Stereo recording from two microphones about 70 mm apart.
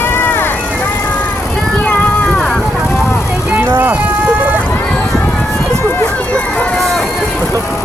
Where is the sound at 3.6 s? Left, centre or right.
Right.